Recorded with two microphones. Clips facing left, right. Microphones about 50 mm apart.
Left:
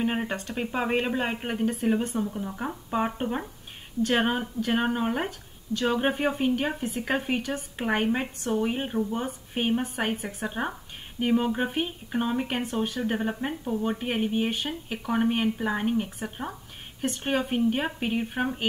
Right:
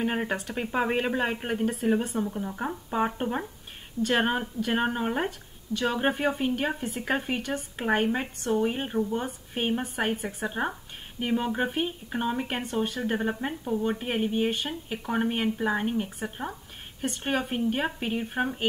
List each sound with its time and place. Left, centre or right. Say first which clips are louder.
0.2 s speech: even; centre